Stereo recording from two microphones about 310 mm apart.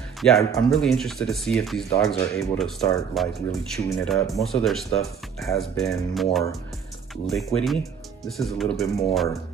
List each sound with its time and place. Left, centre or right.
0.2 s speech: centre
7.2 s speech: centre